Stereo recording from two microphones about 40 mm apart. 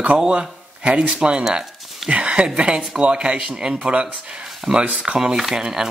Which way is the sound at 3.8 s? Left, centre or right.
Right.